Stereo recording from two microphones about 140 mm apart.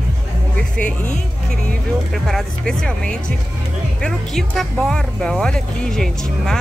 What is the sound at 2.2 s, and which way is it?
Speech, 5° left (ahead or behind).